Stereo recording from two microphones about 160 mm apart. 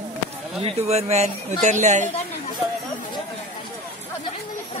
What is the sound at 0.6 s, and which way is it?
A woman's voice, 40° right (ahead or behind).